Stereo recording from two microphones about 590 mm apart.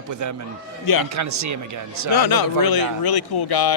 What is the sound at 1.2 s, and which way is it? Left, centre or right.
Speech, right.